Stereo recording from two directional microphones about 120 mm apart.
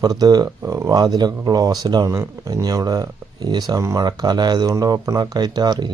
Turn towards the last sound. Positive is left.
turn(degrees=-35)  # may be behind; listen again after turning